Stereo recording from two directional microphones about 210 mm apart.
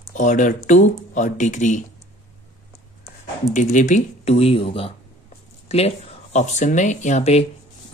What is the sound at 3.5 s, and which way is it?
Speech, 35° left (ahead or behind).